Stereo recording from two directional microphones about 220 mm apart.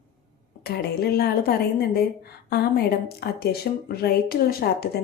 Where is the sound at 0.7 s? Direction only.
45° left (ahead or behind).